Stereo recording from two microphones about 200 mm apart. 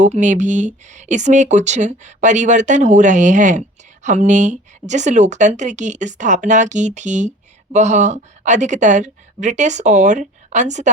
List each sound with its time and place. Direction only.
0.0 s speech: 35° right (ahead or behind)